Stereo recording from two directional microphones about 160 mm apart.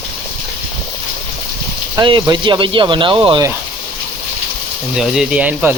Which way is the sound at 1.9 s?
30° right (ahead or behind).